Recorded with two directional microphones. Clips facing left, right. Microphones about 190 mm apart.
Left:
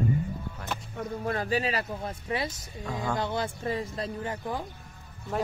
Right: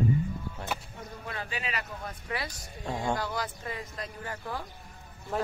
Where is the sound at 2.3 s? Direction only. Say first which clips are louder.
Left 5 dB; 20° left (ahead or behind).